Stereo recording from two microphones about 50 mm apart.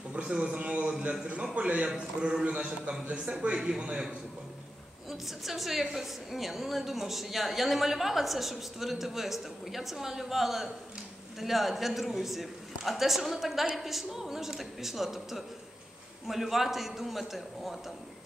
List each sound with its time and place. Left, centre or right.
0.1 s a man's voice: centre
5.1 s a woman's voice: centre